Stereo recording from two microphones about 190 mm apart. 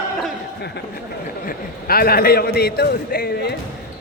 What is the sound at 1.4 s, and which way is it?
A man's voice, 55° left (ahead or behind).